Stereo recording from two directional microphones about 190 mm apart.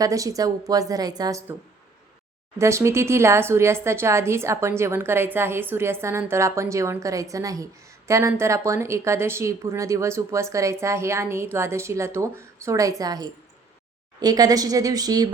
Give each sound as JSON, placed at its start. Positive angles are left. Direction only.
{"t": 0.0, "sound": "a woman's voice", "side_deg": -15}
{"t": 2.6, "sound": "a woman's voice", "side_deg": -15}